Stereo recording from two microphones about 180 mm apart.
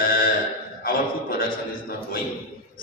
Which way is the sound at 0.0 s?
55° left (ahead or behind).